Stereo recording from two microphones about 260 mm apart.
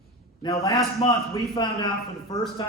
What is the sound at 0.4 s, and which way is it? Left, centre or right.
A man's voice, centre.